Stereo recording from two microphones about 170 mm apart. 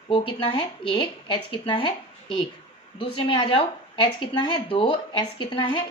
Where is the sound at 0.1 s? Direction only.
30° left (ahead or behind).